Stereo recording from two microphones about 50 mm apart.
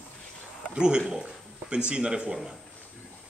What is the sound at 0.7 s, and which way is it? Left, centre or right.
A man's voice, centre.